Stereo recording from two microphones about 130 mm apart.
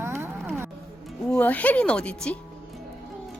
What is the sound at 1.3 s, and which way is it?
Speech, 10° left (ahead or behind).